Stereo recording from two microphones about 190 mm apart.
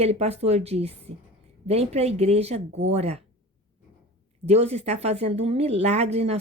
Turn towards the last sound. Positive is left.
turn(degrees=-35)  # may be behind; listen again after turning